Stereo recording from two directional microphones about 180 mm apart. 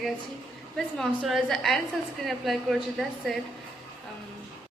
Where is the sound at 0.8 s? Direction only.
Centre (ahead or behind).